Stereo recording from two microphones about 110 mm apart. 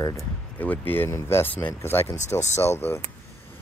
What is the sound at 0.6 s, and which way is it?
Speech, 15° left (ahead or behind).